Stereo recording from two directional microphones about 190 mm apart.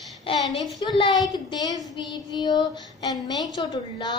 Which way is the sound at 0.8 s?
20° left (ahead or behind).